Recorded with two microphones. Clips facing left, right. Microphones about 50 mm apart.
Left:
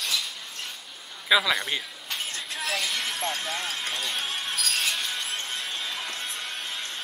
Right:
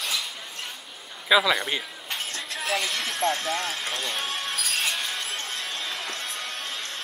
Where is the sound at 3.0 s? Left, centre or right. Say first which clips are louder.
Right 4 dB; centre.